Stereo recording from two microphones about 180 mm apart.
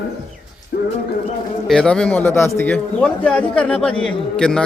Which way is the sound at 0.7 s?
55° left (ahead or behind).